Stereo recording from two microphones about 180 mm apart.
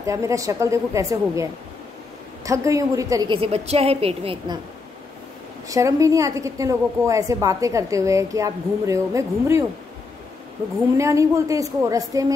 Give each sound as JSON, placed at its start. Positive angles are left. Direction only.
{"t": 0.0, "sound": "a woman's voice", "side_deg": -15}
{"t": 5.7, "sound": "a woman's voice", "side_deg": -20}
{"t": 11.0, "sound": "a woman's voice", "side_deg": -15}